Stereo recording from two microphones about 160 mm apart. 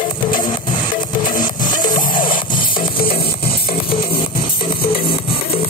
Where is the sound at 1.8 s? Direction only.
30° left (ahead or behind).